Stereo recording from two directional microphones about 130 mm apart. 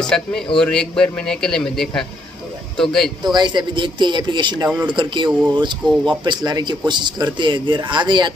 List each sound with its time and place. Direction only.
0.1 s a man's voice: 5° left (ahead or behind)
3.3 s speech: 35° right (ahead or behind)